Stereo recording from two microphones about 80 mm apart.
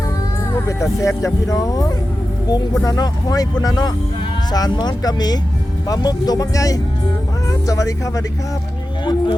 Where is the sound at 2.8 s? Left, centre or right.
Left.